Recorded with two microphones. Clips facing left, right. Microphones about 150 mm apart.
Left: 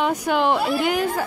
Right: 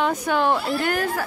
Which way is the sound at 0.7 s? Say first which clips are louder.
Left 2 dB; 15° left (ahead or behind).